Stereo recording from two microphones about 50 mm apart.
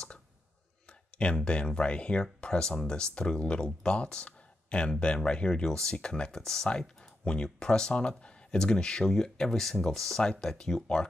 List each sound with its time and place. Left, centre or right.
0.8 s speech: left